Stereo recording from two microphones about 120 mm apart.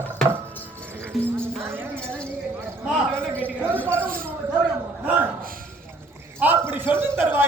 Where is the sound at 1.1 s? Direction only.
Centre (ahead or behind).